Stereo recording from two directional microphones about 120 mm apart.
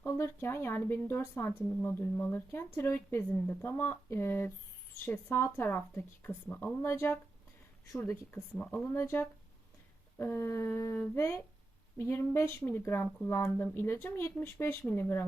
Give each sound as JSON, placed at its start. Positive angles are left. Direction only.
{"t": 0.0, "sound": "speech", "side_deg": 20}